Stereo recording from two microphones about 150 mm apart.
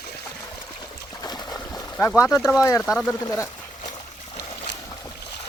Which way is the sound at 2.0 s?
15° left (ahead or behind).